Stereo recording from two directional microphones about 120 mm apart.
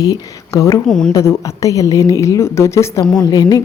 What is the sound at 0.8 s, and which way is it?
Speech, 5° left (ahead or behind).